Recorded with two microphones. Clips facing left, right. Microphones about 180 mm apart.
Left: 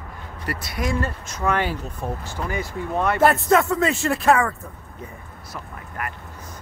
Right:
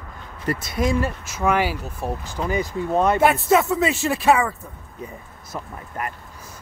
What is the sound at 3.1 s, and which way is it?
Speech, centre (ahead or behind).